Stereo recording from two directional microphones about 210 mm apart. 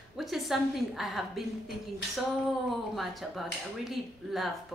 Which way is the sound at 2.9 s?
Centre (ahead or behind).